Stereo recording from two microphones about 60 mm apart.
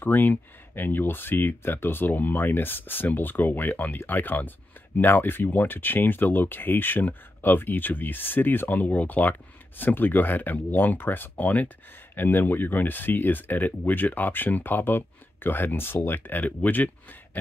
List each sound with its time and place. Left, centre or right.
0.0 s speech: left